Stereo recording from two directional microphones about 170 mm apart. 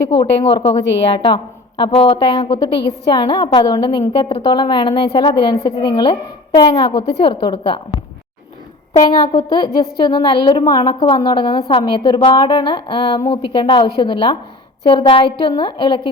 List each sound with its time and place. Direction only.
0.2 s a woman's voice: 30° left (ahead or behind)
9.0 s a woman's voice: 25° left (ahead or behind)